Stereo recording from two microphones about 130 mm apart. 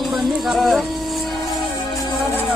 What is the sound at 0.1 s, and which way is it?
Music, centre (ahead or behind).